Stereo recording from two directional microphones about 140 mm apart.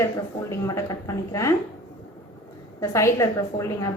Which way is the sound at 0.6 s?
20° left (ahead or behind).